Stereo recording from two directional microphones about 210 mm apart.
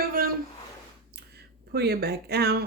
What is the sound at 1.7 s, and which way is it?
Speech, 50° right (ahead or behind).